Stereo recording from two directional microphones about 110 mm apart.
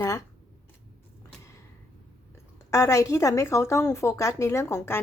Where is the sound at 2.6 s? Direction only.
30° left (ahead or behind).